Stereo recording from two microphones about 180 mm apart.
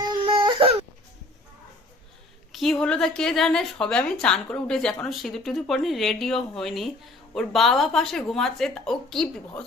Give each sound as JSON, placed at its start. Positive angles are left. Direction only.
{"t": 0.1, "sound": "baby cry", "side_deg": -30}
{"t": 2.5, "sound": "a woman's voice", "side_deg": 0}